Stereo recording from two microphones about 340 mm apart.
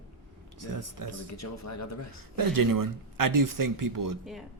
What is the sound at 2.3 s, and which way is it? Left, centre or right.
Speech, right.